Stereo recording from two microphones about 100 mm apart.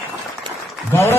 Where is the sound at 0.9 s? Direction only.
30° left (ahead or behind).